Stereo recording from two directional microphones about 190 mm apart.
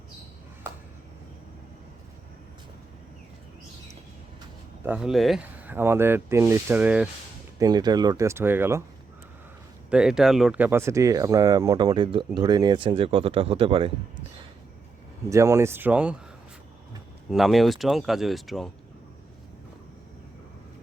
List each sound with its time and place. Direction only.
4.9 s speech: 5° right (ahead or behind)
7.6 s speech: 20° right (ahead or behind)
9.9 s speech: 5° right (ahead or behind); by 13.9 s 30° right (ahead or behind)
15.3 s speech: 15° right (ahead or behind)
17.3 s speech: centre (ahead or behind)